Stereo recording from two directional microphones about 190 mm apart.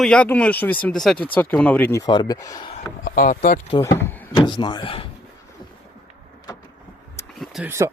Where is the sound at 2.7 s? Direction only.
45° left (ahead or behind).